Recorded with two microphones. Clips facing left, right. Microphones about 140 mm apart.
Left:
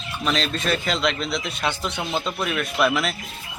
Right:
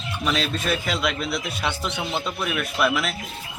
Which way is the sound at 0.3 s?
5° right (ahead or behind).